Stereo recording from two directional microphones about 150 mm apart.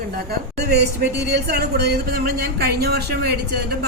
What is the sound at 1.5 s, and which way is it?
Speech, 90° right.